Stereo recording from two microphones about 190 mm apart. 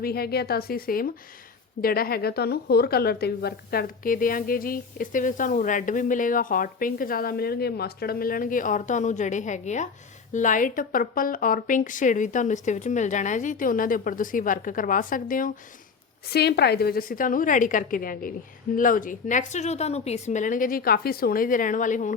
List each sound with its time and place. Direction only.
0.0 s a woman's voice: 55° left (ahead or behind)
16.3 s a woman's voice: 60° left (ahead or behind); by 22.1 s 40° left (ahead or behind)